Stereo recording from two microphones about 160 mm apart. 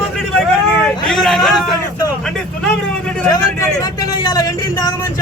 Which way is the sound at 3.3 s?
20° left (ahead or behind).